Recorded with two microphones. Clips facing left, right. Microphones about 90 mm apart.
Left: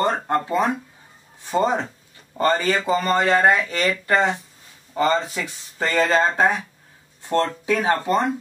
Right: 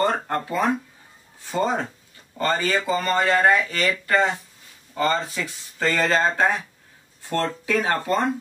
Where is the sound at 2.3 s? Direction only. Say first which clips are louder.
Left 3 dB; 20° left (ahead or behind).